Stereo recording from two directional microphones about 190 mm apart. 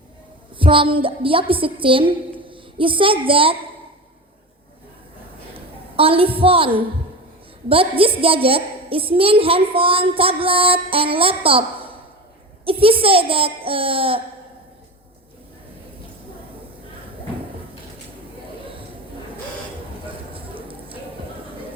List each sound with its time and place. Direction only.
0.5 s a woman's voice: 25° right (ahead or behind)
5.5 s a sound: 30° right (ahead or behind)
6.4 s a woman's voice: 30° right (ahead or behind)
12.6 s a woman's voice: 30° right (ahead or behind)
20.3 s squish: 30° right (ahead or behind)